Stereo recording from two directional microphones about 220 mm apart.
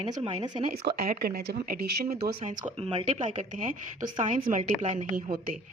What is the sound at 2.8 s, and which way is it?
A woman's voice, 25° right (ahead or behind).